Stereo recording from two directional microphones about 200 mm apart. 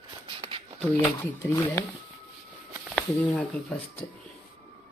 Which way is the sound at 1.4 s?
10° left (ahead or behind).